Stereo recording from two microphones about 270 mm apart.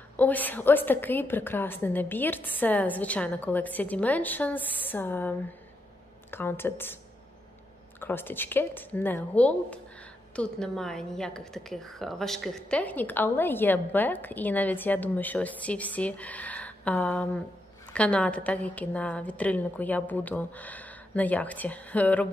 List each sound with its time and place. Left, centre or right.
0.2 s a woman's voice: centre
6.3 s a woman's voice: centre
8.0 s a woman's voice: centre